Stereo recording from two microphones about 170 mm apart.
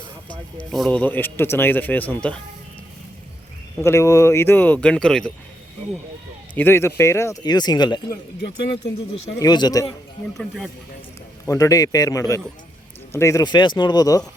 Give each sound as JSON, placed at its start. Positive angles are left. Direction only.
{"t": 0.3, "sound": "speech", "side_deg": 5}
{"t": 3.8, "sound": "speech", "side_deg": 15}
{"t": 6.5, "sound": "speech", "side_deg": 10}
{"t": 9.4, "sound": "speech", "side_deg": 25}
{"t": 10.3, "sound": "speech", "side_deg": 0}
{"t": 11.4, "sound": "speech", "side_deg": 20}